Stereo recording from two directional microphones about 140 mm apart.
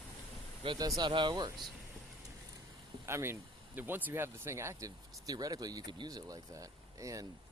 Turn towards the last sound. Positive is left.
turn(degrees=-25)  # may be behind; listen again after turning